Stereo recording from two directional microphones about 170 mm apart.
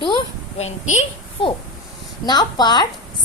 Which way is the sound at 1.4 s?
30° left (ahead or behind).